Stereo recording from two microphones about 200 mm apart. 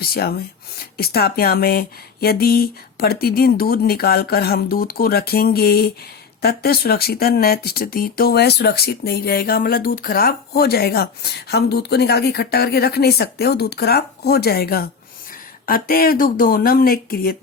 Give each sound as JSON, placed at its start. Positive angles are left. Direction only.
{"t": 0.0, "sound": "speech", "side_deg": 50}